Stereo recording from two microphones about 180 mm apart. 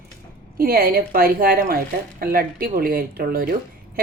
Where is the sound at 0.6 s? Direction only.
55° right (ahead or behind).